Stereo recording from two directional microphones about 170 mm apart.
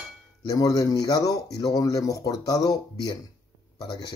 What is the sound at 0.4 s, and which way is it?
Speech, 20° left (ahead or behind).